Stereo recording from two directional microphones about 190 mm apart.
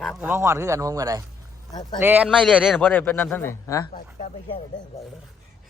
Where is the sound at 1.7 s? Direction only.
20° left (ahead or behind).